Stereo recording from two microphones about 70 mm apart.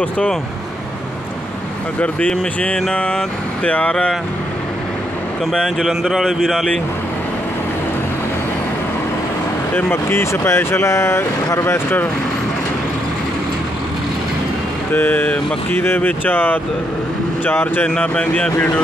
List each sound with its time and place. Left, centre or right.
2.0 s speech: centre
5.5 s speech: centre
10.0 s speech: left
14.9 s speech: left
18.0 s speech: left